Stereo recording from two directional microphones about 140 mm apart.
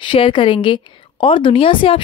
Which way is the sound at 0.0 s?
35° left (ahead or behind).